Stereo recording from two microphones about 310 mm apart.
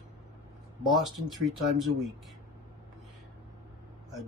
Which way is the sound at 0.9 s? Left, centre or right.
Centre.